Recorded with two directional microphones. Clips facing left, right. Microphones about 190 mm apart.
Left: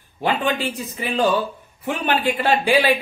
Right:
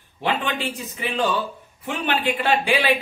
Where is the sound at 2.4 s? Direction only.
35° left (ahead or behind).